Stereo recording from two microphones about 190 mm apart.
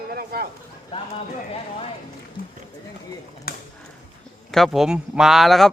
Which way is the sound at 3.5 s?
50° left (ahead or behind).